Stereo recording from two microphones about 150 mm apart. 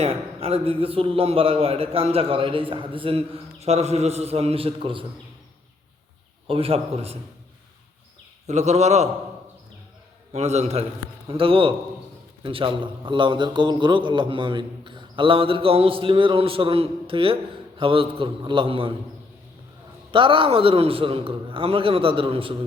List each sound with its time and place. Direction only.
0.0 s a man's voice: 40° right (ahead or behind)
6.5 s a man's voice: 40° right (ahead or behind)
8.4 s a man's voice: 50° right (ahead or behind)
10.3 s a man's voice: 45° right (ahead or behind)
20.1 s a man's voice: 35° right (ahead or behind)